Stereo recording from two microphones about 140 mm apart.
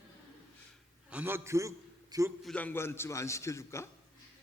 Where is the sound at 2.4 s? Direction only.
10° left (ahead or behind).